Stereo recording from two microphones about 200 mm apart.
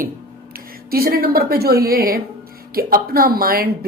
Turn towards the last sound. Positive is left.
turn(degrees=-50)  # may be behind; listen again after turning